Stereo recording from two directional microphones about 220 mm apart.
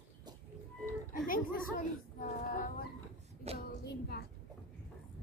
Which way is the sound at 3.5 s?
45° left (ahead or behind).